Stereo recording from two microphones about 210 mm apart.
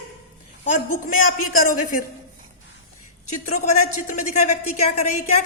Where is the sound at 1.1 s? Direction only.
40° left (ahead or behind).